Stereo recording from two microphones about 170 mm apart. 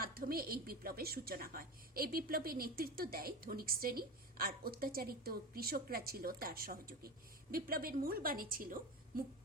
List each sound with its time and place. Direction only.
0.0 s a woman's voice: 60° right (ahead or behind)